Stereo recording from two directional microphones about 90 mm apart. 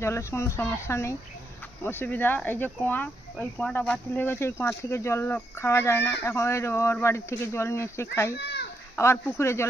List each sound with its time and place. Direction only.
0.0 s speech: 30° left (ahead or behind)